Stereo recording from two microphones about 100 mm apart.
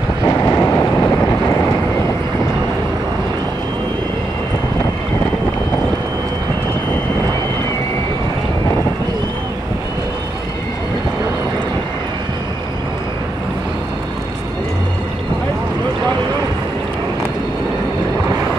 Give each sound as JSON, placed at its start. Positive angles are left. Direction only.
{"t": 0.2, "sound": "vehicle", "side_deg": 30}